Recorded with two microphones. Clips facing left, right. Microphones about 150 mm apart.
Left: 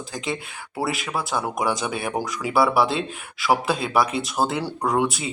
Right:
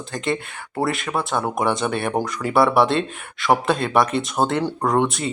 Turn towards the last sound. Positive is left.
turn(degrees=5)  # may be behind; listen again after turning